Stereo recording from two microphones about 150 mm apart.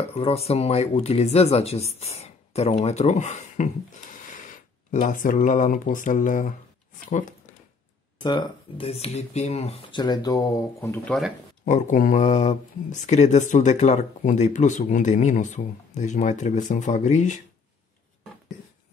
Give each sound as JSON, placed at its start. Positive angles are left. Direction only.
{"t": 0.1, "sound": "speech", "side_deg": 45}
{"t": 8.2, "sound": "speech", "side_deg": 30}
{"t": 11.6, "sound": "speech", "side_deg": 55}